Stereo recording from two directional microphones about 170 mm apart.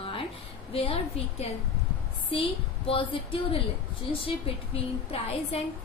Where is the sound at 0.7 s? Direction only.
35° left (ahead or behind).